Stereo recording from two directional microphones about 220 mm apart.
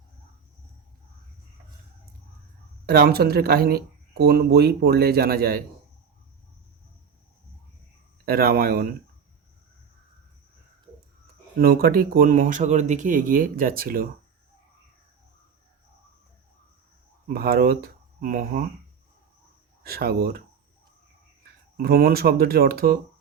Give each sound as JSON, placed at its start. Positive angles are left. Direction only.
{"t": 2.8, "sound": "speech", "side_deg": -45}
{"t": 8.2, "sound": "speech", "side_deg": -45}
{"t": 11.6, "sound": "speech", "side_deg": -45}
{"t": 17.2, "sound": "speech", "side_deg": -45}
{"t": 19.8, "sound": "speech", "side_deg": -45}
{"t": 21.8, "sound": "speech", "side_deg": -45}